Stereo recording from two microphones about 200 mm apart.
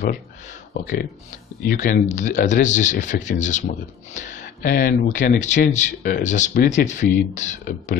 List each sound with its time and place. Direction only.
0.7 s speech: 45° left (ahead or behind)